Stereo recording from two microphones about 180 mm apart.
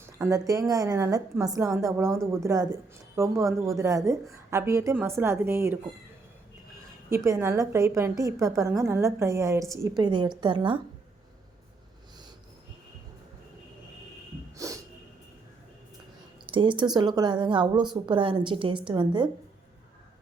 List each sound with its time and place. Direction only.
0.2 s a woman's voice: 20° right (ahead or behind)
7.1 s a woman's voice: 15° right (ahead or behind)
14.5 s snort: 20° right (ahead or behind)
16.5 s a woman's voice: 25° right (ahead or behind)